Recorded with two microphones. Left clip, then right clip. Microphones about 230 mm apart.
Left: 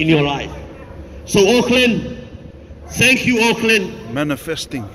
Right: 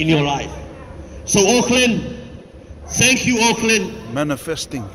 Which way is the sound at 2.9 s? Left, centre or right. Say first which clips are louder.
Left 2 dB; right.